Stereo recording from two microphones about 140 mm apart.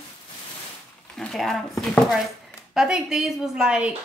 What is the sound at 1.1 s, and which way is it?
Speech, centre (ahead or behind).